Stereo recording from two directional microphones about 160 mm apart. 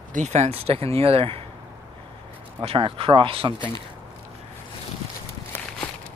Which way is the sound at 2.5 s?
35° right (ahead or behind).